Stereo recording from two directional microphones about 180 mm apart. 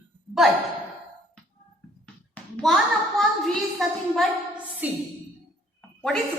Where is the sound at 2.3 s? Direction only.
5° left (ahead or behind).